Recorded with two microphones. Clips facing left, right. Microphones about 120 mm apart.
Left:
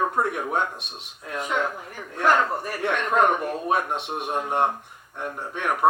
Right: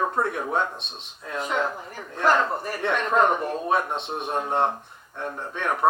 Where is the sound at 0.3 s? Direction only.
10° left (ahead or behind).